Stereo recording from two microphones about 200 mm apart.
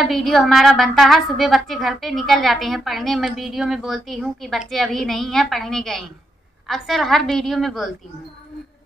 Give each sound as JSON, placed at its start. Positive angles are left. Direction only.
{"t": 0.0, "sound": "a woman's voice", "side_deg": 0}